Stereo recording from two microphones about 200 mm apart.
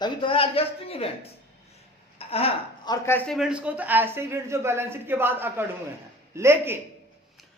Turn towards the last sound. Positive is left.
turn(degrees=-10)  # may be behind; listen again after turning